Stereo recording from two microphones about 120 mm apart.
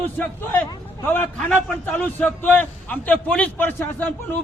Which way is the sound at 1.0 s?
15° left (ahead or behind).